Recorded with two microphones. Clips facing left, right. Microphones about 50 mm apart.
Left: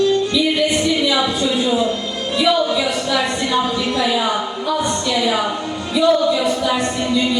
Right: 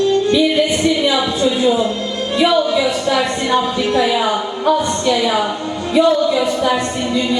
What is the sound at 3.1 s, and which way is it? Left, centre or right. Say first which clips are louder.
A woman's voice: right 3 dB; right.